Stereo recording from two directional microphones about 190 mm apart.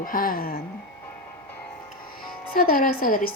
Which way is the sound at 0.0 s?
45° left (ahead or behind).